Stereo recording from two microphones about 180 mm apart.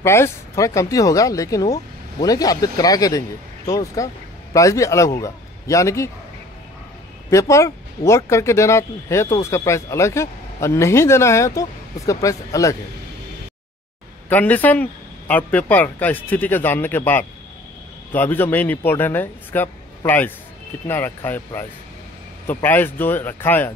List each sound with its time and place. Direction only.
0.0 s a man's voice: 15° left (ahead or behind)
7.2 s speech: 15° left (ahead or behind)
14.3 s speech: 10° left (ahead or behind)
22.5 s speech: 10° left (ahead or behind)